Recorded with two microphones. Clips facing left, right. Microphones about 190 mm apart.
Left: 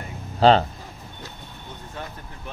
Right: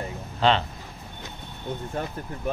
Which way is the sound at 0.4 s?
40° left (ahead or behind).